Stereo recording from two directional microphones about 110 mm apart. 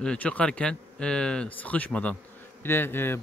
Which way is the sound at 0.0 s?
10° left (ahead or behind).